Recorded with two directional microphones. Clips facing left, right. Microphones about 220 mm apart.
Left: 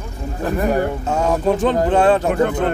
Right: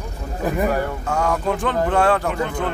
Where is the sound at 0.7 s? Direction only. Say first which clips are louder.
Left 4 dB; 20° left (ahead or behind).